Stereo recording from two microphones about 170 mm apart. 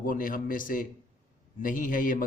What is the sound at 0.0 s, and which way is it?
A man's voice, 55° left (ahead or behind).